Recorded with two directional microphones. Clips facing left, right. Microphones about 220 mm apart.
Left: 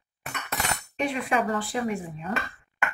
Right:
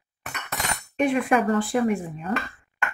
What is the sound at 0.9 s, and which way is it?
A woman's voice, 50° right (ahead or behind).